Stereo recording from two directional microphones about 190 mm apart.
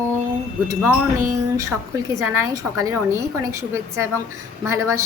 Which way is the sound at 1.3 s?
15° right (ahead or behind).